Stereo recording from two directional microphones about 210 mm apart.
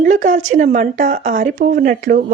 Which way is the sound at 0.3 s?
65° right (ahead or behind).